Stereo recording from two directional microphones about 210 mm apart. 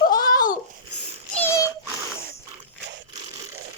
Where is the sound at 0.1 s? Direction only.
20° left (ahead or behind).